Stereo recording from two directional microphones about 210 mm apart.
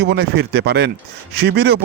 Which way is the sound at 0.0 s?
50° right (ahead or behind).